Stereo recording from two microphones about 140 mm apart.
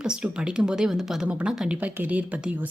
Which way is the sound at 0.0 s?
5° right (ahead or behind).